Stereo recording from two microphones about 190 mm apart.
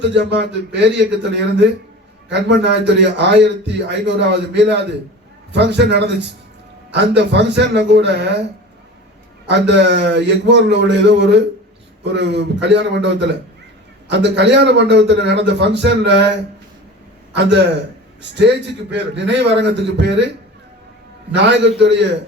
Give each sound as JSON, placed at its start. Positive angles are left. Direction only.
{"t": 0.0, "sound": "a man's voice", "side_deg": -65}
{"t": 9.5, "sound": "a man's voice", "side_deg": -65}
{"t": 17.3, "sound": "a man's voice", "side_deg": -65}
{"t": 21.3, "sound": "a man's voice", "side_deg": -65}